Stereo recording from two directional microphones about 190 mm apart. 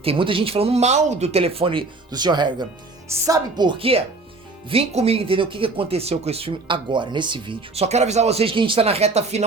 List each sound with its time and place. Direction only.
0.0 s speech: 30° right (ahead or behind)